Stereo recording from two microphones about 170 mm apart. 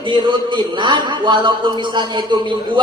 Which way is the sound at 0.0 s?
25° right (ahead or behind).